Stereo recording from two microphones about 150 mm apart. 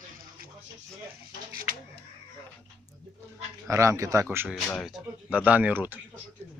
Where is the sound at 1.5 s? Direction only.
80° right.